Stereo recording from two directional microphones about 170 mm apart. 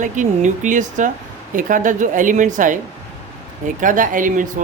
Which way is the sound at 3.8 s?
50° right (ahead or behind).